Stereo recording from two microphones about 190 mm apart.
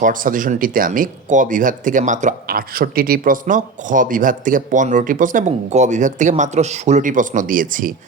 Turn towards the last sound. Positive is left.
turn(degrees=-45)  # may be behind; listen again after turning